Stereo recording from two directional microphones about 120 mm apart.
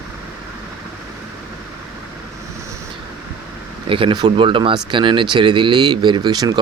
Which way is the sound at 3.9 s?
45° right (ahead or behind).